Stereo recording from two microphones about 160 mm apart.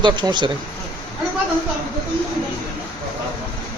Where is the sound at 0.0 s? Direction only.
30° right (ahead or behind).